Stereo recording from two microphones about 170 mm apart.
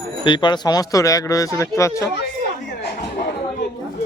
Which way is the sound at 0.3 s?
30° left (ahead or behind).